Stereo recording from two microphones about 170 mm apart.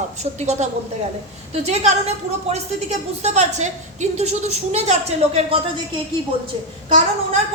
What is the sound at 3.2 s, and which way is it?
A woman's voice, 45° right (ahead or behind).